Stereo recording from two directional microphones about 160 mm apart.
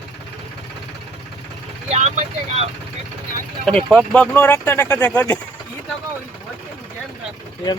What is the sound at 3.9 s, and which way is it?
Speech, 5° left (ahead or behind).